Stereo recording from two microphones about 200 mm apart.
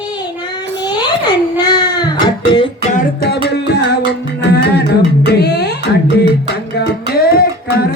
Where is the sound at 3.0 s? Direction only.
55° left (ahead or behind).